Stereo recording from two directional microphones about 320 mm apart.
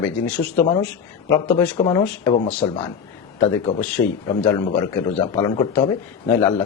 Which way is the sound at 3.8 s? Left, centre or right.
Centre.